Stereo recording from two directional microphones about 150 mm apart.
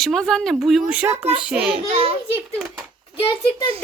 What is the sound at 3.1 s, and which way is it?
Speech, 35° left (ahead or behind).